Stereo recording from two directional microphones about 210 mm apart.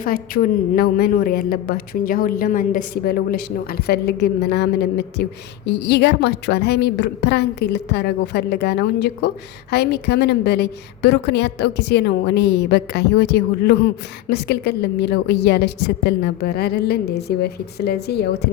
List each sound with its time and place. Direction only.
0.0 s a woman's voice: 45° left (ahead or behind)